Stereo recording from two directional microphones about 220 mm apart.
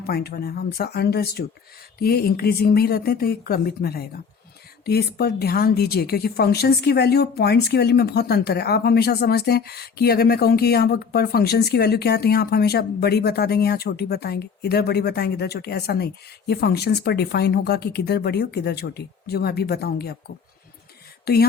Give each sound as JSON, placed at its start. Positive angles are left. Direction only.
{"t": 0.0, "sound": "a woman's voice", "side_deg": 45}
{"t": 21.3, "sound": "a woman's voice", "side_deg": 45}